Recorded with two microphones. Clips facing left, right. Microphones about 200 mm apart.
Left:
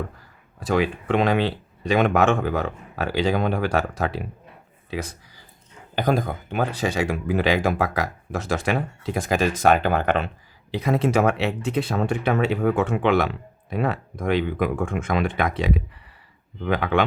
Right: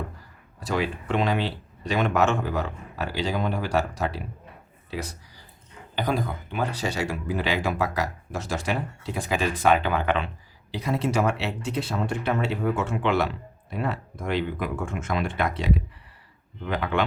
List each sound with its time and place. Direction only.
0.6 s speech: 55° left (ahead or behind)
6.0 s speech: 45° left (ahead or behind)
9.3 s speech: 45° left (ahead or behind)
10.7 s speech: 55° left (ahead or behind)